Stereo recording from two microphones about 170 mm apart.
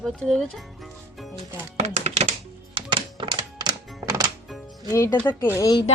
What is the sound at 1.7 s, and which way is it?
Music, 40° right (ahead or behind).